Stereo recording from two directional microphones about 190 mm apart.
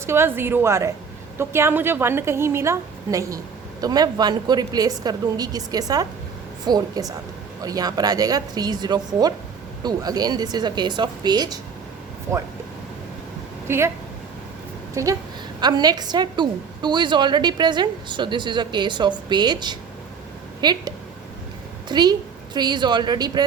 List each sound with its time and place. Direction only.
0.0 s a woman's voice: 15° right (ahead or behind)
13.7 s speech: 15° right (ahead or behind)
15.0 s a woman's voice: 15° right (ahead or behind)